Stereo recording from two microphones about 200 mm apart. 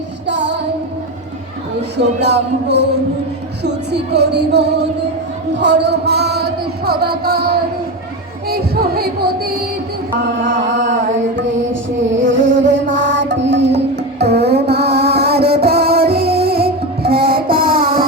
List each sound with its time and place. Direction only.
0.3 s music: 60° right (ahead or behind)
2.0 s music: 60° right (ahead or behind)
10.4 s mantra: 65° right (ahead or behind)
12.7 s music: 65° right (ahead or behind); by 17.4 s 50° right (ahead or behind)
17.5 s a sound: 50° right (ahead or behind)